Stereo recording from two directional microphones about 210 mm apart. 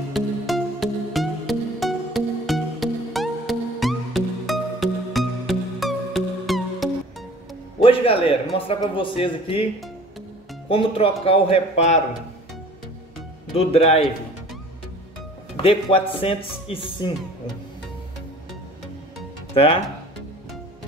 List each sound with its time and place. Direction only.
0.1 s music: centre (ahead or behind)
7.8 s a sound: 25° left (ahead or behind)
8.5 s speech: 25° left (ahead or behind)
10.7 s speech: 25° left (ahead or behind)
13.6 s speech: 30° left (ahead or behind)
15.5 s speech: 25° left (ahead or behind)
19.5 s speech: 25° left (ahead or behind)